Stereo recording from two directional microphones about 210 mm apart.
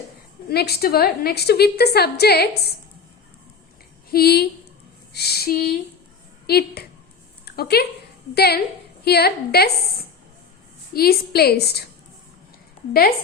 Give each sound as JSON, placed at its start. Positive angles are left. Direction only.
{"t": 0.4, "sound": "a woman's voice", "side_deg": 50}
{"t": 4.1, "sound": "a woman's voice", "side_deg": 50}
{"t": 7.4, "sound": "a sound", "side_deg": 50}
{"t": 8.4, "sound": "a woman's voice", "side_deg": 50}
{"t": 10.9, "sound": "a woman's voice", "side_deg": 45}